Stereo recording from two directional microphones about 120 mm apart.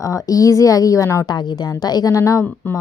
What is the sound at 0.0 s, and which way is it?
A woman's voice, 25° left (ahead or behind).